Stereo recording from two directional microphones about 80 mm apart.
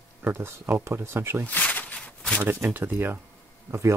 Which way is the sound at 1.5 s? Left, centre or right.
Left.